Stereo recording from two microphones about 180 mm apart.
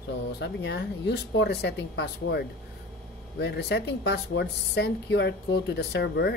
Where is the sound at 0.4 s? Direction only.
70° left (ahead or behind).